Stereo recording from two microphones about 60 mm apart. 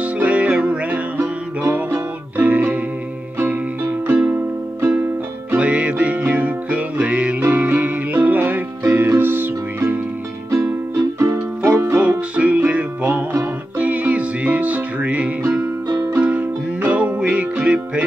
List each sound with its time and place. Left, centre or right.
0.0 s music: right
3.3 s music: right
5.6 s music: right
10.5 s music: right
12.0 s music: right
15.9 s music: right
16.2 s music: right